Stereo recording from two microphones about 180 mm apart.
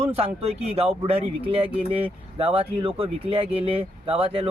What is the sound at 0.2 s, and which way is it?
Speech, 35° right (ahead or behind).